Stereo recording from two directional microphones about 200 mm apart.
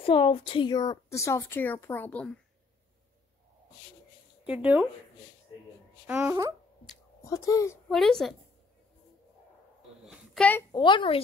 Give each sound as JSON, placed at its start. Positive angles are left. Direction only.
{"t": 0.0, "sound": "a woman's voice", "side_deg": 25}
{"t": 4.5, "sound": "speech", "side_deg": -5}
{"t": 6.0, "sound": "speech", "side_deg": -10}
{"t": 7.2, "sound": "a woman's voice", "side_deg": 15}
{"t": 7.9, "sound": "a woman's voice", "side_deg": 0}
{"t": 10.0, "sound": "a sound", "side_deg": 5}
{"t": 10.7, "sound": "speech", "side_deg": 25}